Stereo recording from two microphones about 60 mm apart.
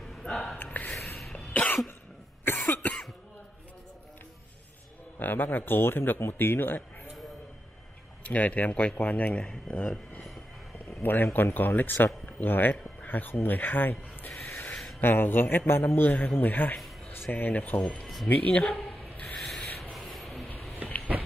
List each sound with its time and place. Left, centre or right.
0.0 s gasp: centre
0.9 s a sound: centre
1.3 s cough: left
5.2 s speech: left
8.2 s speech: left
10.9 s speech: left
17.7 s speech: centre
18.3 s a sound: left
19.3 s rub: centre
19.8 s a sound: centre